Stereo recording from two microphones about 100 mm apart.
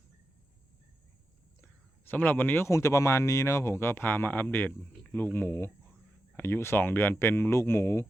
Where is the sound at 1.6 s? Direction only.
20° left (ahead or behind).